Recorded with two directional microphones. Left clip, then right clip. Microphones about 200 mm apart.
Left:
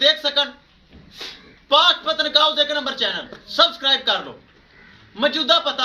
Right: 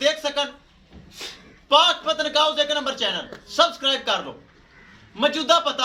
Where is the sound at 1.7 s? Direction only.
15° left (ahead or behind).